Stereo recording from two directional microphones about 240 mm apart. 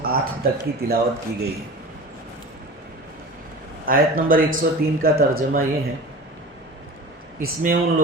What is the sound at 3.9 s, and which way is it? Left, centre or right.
Speech, right.